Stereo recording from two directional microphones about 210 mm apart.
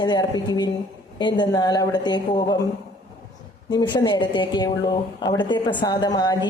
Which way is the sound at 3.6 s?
20° left (ahead or behind).